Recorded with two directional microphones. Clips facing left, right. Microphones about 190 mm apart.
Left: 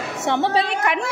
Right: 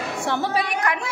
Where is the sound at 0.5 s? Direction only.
25° left (ahead or behind).